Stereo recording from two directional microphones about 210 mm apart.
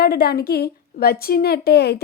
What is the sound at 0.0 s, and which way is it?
A woman's voice, 50° left (ahead or behind).